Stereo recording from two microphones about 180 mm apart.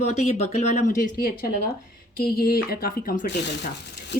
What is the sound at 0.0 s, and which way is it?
Speech, 35° left (ahead or behind).